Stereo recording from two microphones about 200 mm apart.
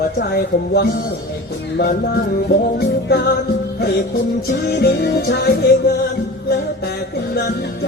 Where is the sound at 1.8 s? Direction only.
50° left (ahead or behind).